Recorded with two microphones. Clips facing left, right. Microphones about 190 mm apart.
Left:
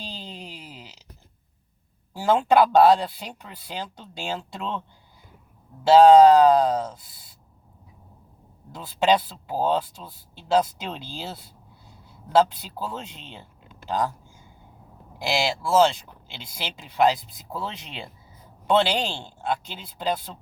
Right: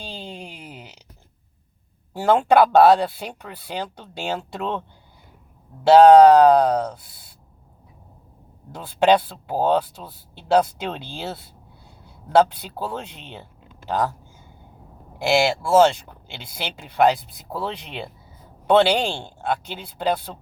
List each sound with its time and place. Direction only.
0.2 s a sound: 60° right (ahead or behind)
2.1 s speech: 65° right (ahead or behind)
5.8 s speech: 65° right (ahead or behind)
8.8 s speech: 60° right (ahead or behind)
15.4 s speech: 60° right (ahead or behind)